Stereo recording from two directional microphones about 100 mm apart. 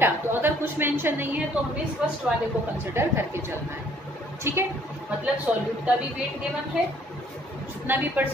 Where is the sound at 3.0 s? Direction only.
25° right (ahead or behind).